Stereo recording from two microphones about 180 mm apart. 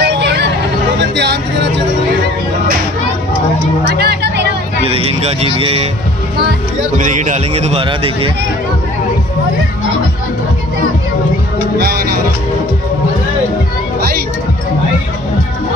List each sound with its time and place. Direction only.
0.0 s hubbub: 70° right (ahead or behind)
1.1 s music: 75° right (ahead or behind)
4.0 s music: 65° right (ahead or behind)
4.8 s a man's voice: 30° right (ahead or behind)
7.0 s a man's voice: 45° right (ahead or behind)
11.8 s music: 60° right (ahead or behind)